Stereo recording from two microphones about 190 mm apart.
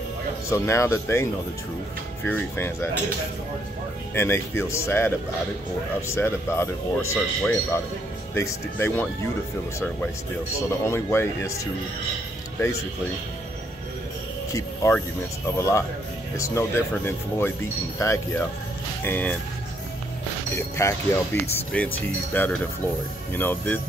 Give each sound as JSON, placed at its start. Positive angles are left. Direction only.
{"t": 0.5, "sound": "speech", "side_deg": 15}
{"t": 4.1, "sound": "speech", "side_deg": 10}
{"t": 10.9, "sound": "speech", "side_deg": 15}
{"t": 14.5, "sound": "speech", "side_deg": 15}
{"t": 20.5, "sound": "speech", "side_deg": 15}